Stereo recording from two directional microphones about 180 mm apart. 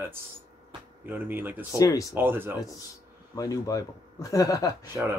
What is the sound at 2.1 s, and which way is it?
Speech, 10° right (ahead or behind).